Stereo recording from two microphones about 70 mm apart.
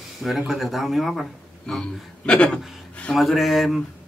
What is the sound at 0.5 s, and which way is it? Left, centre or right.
Speech, centre.